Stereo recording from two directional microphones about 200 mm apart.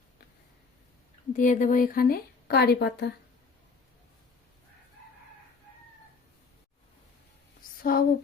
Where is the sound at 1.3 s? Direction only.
40° left (ahead or behind); by 3.1 s 55° left (ahead or behind).